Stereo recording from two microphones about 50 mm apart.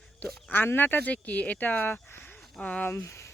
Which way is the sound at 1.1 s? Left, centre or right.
Left.